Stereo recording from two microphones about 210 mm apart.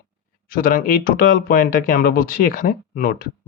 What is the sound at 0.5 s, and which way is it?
Speech, 40° left (ahead or behind).